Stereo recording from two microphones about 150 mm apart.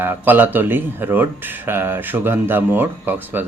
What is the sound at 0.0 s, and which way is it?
Speech, 15° right (ahead or behind).